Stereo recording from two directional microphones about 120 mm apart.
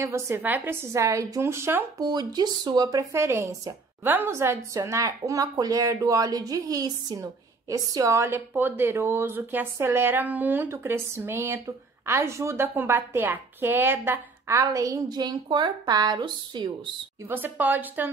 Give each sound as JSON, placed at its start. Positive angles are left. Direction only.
{"t": 0.0, "sound": "a woman's voice", "side_deg": -20}
{"t": 2.0, "sound": "a woman's voice", "side_deg": -35}
{"t": 17.3, "sound": "a woman's voice", "side_deg": -15}